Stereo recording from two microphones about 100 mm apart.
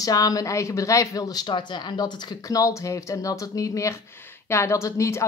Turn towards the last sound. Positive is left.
turn(degrees=30)  # may be behind; listen again after turning